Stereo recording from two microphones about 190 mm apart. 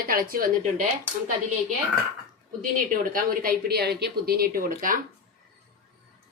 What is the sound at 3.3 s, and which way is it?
Speech, 50° right (ahead or behind).